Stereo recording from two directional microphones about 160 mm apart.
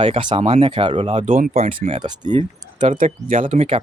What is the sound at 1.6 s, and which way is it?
Speech, 35° right (ahead or behind).